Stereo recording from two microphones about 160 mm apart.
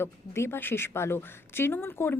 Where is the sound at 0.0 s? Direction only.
15° left (ahead or behind).